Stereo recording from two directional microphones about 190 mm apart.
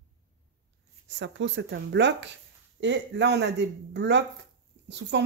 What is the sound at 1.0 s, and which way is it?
Speech, 70° right (ahead or behind).